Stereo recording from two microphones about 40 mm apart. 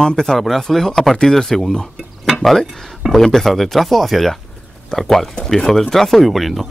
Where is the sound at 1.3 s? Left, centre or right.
Centre.